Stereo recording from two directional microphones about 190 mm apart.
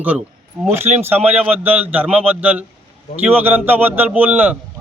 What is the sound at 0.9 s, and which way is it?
Speech, 40° right (ahead or behind).